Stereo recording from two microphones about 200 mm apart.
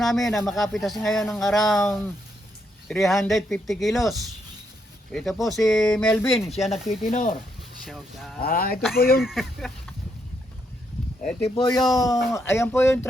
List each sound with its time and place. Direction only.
0.0 s speech: centre (ahead or behind)
7.1 s speech: 40° left (ahead or behind)
7.9 s speech: centre (ahead or behind)
8.4 s speech: 45° left (ahead or behind)
9.2 s speech: centre (ahead or behind)
11.3 s speech: 10° left (ahead or behind)
12.3 s speech: 10° left (ahead or behind)